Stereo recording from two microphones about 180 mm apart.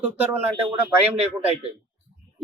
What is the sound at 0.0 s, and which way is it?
A man's voice, 10° right (ahead or behind).